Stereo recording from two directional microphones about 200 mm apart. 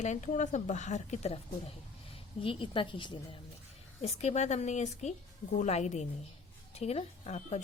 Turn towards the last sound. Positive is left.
turn(degrees=35)  # may be behind; listen again after turning